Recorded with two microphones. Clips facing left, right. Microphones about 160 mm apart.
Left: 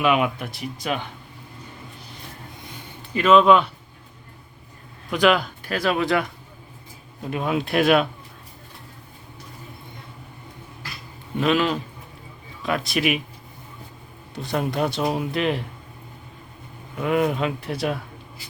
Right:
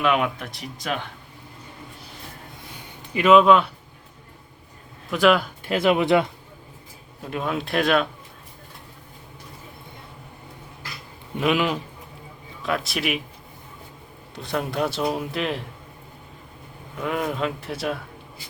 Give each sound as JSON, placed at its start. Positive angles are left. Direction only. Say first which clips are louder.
{"t": 0.0, "sound": "speech", "louder": "left 1 dB", "side_deg": 5}
{"t": 2.7, "sound": "a sound", "louder": "left 1 dB", "side_deg": -10}
{"t": 3.4, "sound": "speech", "louder": "even", "side_deg": 0}
{"t": 5.1, "sound": "speech", "louder": "even", "side_deg": 0}
{"t": 5.6, "sound": "speech", "louder": "right 4 dB", "side_deg": -20}
{"t": 7.2, "sound": "speech", "louder": "left 3 dB", "side_deg": 5}
{"t": 11.3, "sound": "speech", "louder": "left 1 dB", "side_deg": -10}
{"t": 12.6, "sound": "speech", "louder": "left 3 dB", "side_deg": 0}
{"t": 14.4, "sound": "speech", "louder": "left 1 dB", "side_deg": 0}
{"t": 17.0, "sound": "speech", "louder": "left 4 dB", "side_deg": 5}